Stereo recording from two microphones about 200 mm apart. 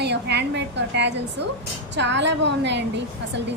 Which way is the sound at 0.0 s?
60° right (ahead or behind).